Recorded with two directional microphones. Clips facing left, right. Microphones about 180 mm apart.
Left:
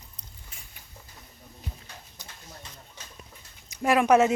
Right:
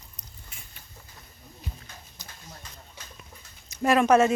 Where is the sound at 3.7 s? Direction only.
15° left (ahead or behind).